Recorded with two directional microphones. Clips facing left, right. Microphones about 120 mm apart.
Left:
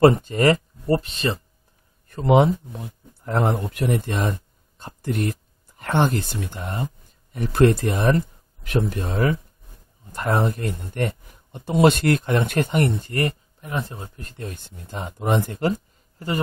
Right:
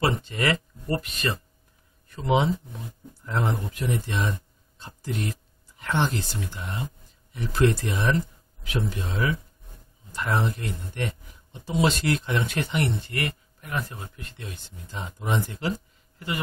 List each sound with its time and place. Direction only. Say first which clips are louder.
0.0 s speech: left 10 dB; 45° left (ahead or behind); by 1.4 s 30° left (ahead or behind)
2.0 s speech: left 6 dB; 50° left (ahead or behind)
13.6 s speech: even; 25° left (ahead or behind); by 15.7 s 50° left (ahead or behind)